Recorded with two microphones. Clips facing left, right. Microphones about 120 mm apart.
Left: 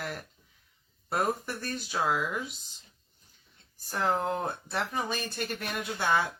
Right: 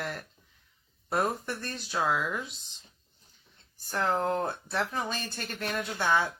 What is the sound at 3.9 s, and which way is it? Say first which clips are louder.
Speech: right 1 dB; 10° left (ahead or behind).